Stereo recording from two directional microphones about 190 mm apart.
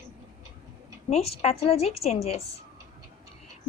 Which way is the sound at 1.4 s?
30° left (ahead or behind).